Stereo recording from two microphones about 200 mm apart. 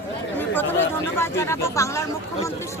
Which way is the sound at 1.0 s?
10° left (ahead or behind).